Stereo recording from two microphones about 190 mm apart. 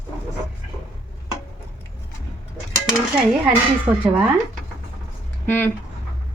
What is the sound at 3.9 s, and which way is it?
Speech, 20° right (ahead or behind).